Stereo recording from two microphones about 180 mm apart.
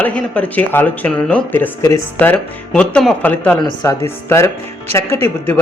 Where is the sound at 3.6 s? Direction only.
25° left (ahead or behind).